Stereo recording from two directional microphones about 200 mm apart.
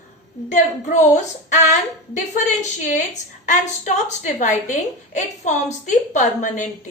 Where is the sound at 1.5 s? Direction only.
35° left (ahead or behind).